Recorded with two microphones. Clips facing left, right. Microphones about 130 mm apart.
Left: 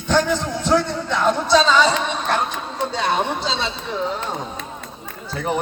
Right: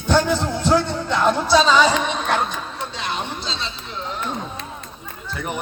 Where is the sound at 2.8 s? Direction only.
35° left (ahead or behind).